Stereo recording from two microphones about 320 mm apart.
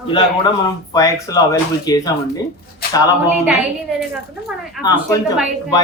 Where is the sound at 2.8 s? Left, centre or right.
Left.